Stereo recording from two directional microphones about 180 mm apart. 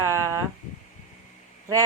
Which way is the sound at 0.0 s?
15° right (ahead or behind).